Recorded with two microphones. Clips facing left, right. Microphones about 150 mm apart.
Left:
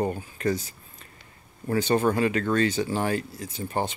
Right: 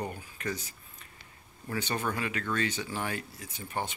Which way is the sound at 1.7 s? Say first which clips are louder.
Left 10 dB; 35° left (ahead or behind).